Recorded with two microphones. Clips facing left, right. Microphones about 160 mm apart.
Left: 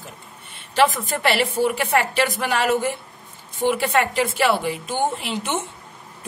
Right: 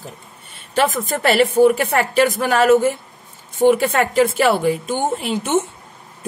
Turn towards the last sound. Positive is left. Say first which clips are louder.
# right 7 dB
turn(degrees=-45)  # may be behind; listen again after turning